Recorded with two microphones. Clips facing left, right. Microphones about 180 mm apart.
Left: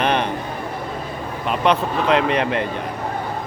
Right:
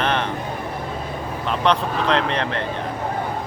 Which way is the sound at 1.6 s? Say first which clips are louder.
Left 2 dB; 10° left (ahead or behind).